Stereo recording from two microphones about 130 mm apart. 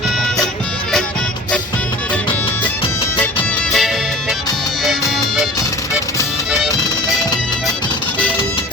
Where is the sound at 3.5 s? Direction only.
5° left (ahead or behind).